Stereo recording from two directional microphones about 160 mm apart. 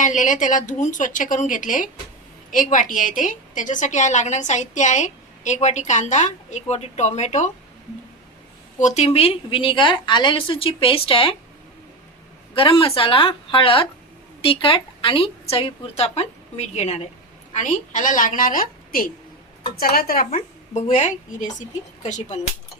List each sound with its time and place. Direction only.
0.0 s a woman's voice: 50° left (ahead or behind)
8.8 s a woman's voice: 40° left (ahead or behind)
12.5 s a woman's voice: 35° left (ahead or behind); by 20.4 s 65° left (ahead or behind)
20.7 s a woman's voice: 50° left (ahead or behind)